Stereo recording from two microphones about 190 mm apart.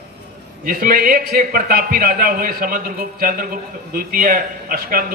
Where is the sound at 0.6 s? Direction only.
50° right (ahead or behind).